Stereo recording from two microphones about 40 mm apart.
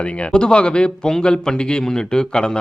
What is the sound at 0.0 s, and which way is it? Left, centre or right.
A man's voice, left.